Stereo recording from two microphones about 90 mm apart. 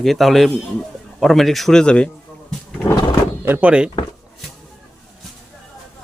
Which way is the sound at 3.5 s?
25° right (ahead or behind).